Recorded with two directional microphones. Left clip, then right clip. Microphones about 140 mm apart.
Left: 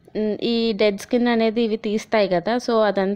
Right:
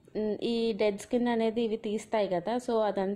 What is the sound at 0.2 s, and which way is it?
A woman's voice, 25° left (ahead or behind).